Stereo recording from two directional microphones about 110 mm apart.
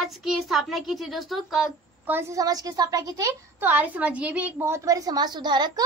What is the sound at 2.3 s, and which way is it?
A woman's voice, 35° right (ahead or behind).